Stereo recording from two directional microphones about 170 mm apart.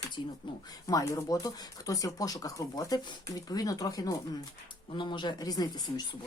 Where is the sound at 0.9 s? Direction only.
20° left (ahead or behind).